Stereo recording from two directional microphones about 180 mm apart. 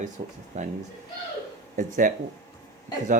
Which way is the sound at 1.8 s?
45° right (ahead or behind).